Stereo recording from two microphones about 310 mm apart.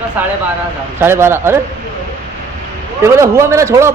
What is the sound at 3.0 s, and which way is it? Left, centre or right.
Speech, centre.